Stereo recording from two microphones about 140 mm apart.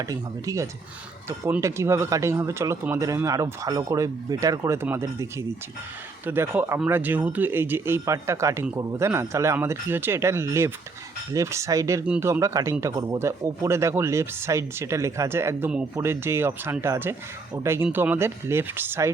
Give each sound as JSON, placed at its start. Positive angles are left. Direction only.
{"t": 0.0, "sound": "speech", "side_deg": -25}